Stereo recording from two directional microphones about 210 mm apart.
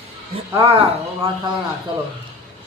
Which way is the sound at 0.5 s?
25° right (ahead or behind).